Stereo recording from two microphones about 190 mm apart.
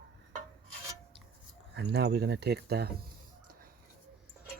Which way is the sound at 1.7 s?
65° right (ahead or behind).